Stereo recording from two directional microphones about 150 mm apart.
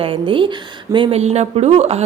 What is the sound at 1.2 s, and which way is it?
Speech, 45° right (ahead or behind).